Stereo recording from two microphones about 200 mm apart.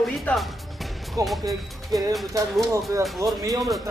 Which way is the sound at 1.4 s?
15° right (ahead or behind).